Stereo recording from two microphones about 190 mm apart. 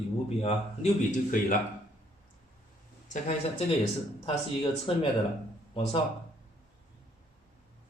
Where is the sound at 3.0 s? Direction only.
35° left (ahead or behind).